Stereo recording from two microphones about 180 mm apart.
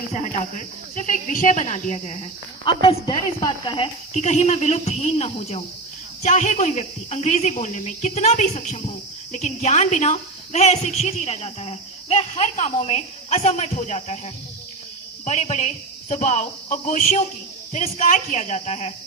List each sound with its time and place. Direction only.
0.1 s a woman's voice: 45° left (ahead or behind)
4.1 s a woman's voice: 40° left (ahead or behind)
15.2 s a woman's voice: 40° left (ahead or behind)